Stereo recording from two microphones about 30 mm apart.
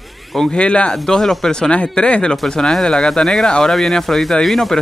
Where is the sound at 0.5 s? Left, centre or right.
Left.